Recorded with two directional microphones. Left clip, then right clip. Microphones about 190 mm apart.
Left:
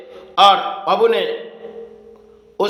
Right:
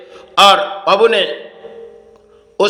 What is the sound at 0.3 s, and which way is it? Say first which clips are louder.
Speech: right 3 dB; 20° right (ahead or behind).